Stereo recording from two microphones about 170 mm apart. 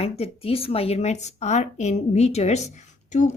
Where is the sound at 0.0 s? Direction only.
35° left (ahead or behind).